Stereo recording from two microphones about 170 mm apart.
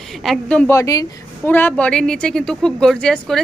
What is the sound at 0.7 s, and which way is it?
Speech, 20° left (ahead or behind).